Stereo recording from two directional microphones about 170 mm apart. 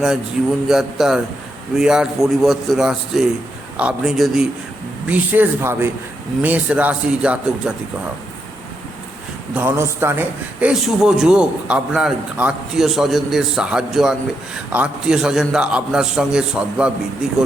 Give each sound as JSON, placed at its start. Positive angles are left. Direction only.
{"t": 0.7, "sound": "a man's voice", "side_deg": 0}
{"t": 9.6, "sound": "a man's voice", "side_deg": -15}